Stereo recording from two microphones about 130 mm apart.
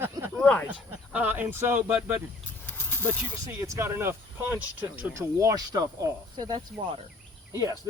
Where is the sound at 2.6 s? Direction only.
15° left (ahead or behind).